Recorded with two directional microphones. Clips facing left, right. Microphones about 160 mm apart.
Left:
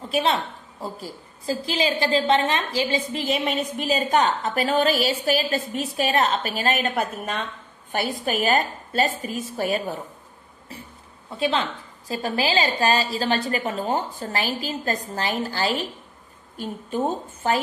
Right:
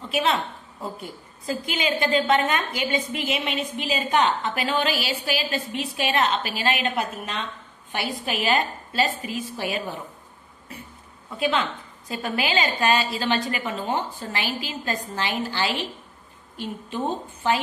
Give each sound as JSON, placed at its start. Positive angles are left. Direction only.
{"t": 0.0, "sound": "a woman's voice", "side_deg": 35}
{"t": 11.3, "sound": "a woman's voice", "side_deg": 35}